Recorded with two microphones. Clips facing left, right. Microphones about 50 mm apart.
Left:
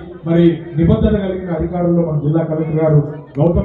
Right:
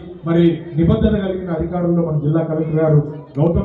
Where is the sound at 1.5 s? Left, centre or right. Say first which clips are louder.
Left 4 dB; left.